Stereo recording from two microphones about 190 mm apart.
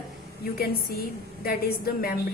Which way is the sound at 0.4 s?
50° left (ahead or behind).